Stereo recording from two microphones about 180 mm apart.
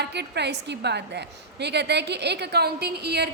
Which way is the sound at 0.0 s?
70° right (ahead or behind).